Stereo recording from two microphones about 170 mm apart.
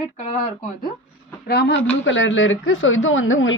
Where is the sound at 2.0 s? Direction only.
90° left.